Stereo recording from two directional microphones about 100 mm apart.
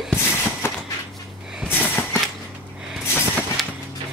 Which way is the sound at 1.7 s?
20° left (ahead or behind).